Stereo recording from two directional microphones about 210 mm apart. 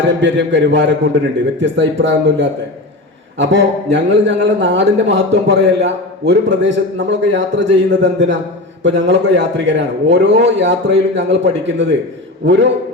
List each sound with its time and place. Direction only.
0.1 s a man's voice: 60° right (ahead or behind)